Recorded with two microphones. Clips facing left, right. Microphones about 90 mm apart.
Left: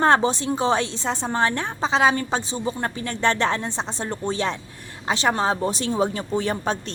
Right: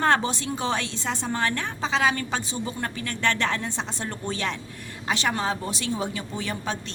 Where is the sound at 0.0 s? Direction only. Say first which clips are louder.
Left 4 dB; 30° left (ahead or behind).